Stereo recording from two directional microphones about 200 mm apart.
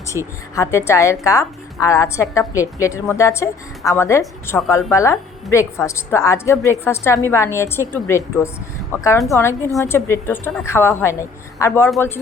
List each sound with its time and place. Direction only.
0.5 s a woman's voice: 15° left (ahead or behind)